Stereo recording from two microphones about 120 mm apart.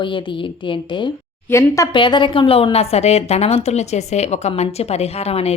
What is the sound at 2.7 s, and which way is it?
A woman's voice, 60° left (ahead or behind).